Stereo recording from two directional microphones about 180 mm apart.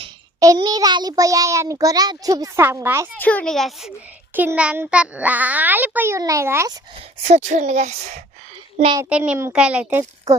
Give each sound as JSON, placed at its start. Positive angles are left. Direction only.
{"t": 0.3, "sound": "a child's voice", "side_deg": -20}
{"t": 3.2, "sound": "a child's voice", "side_deg": 10}
{"t": 7.2, "sound": "a woman's voice", "side_deg": -35}
{"t": 9.0, "sound": "a child's voice", "side_deg": -5}